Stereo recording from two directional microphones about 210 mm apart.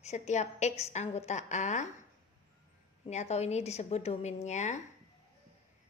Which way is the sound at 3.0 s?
30° left (ahead or behind).